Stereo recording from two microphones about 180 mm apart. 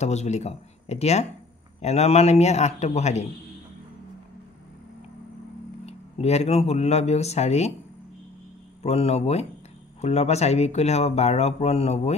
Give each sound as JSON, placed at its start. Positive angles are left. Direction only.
{"t": 0.0, "sound": "speech", "side_deg": 40}
{"t": 5.9, "sound": "speech", "side_deg": 35}
{"t": 8.8, "sound": "speech", "side_deg": 35}